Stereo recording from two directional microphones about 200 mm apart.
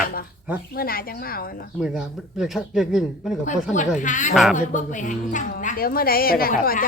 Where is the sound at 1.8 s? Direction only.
5° right (ahead or behind).